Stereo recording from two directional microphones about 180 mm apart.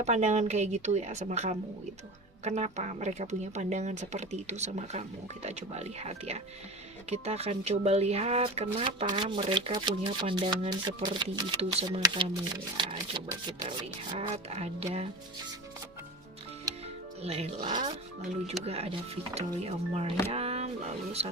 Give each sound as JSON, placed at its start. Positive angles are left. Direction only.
{"t": 0.0, "sound": "speech", "side_deg": -40}
{"t": 17.2, "sound": "speech", "side_deg": -35}
{"t": 20.3, "sound": "a sound", "side_deg": -35}
{"t": 21.2, "sound": "speech", "side_deg": -35}